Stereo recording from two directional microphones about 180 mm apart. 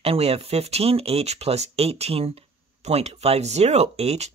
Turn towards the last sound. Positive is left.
turn(degrees=-35)  # may be behind; listen again after turning